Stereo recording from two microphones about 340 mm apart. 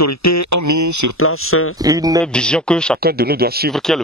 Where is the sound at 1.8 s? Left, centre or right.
Centre.